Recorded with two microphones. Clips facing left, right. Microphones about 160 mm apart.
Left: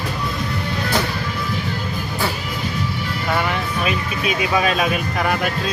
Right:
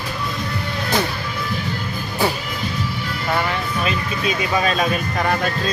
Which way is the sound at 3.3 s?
5° left (ahead or behind).